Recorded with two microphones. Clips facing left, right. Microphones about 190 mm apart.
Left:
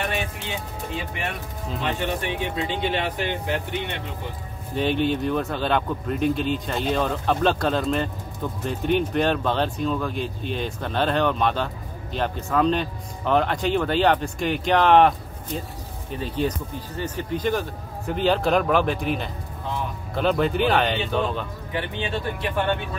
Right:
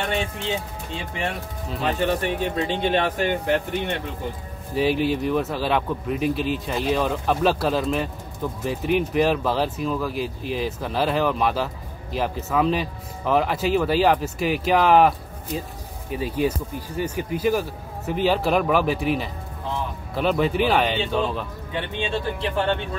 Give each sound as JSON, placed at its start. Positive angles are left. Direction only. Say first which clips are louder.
{"t": 1.8, "sound": "speech", "louder": "right 4 dB", "side_deg": -40}
{"t": 4.7, "sound": "speech", "louder": "right 1 dB", "side_deg": -5}
{"t": 21.7, "sound": "speech", "louder": "right 1 dB", "side_deg": -25}